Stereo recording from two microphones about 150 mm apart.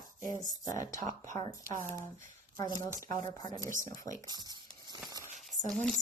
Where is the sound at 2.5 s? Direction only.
25° left (ahead or behind).